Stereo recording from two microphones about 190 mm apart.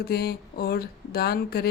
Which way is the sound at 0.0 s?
55° left (ahead or behind).